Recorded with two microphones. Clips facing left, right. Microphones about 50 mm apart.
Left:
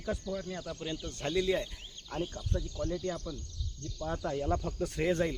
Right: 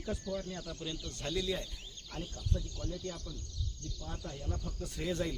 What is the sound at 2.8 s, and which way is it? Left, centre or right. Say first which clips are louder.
Speech: left 7 dB; left.